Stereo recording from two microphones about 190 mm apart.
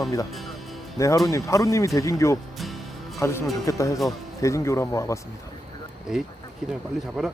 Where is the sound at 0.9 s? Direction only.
15° left (ahead or behind).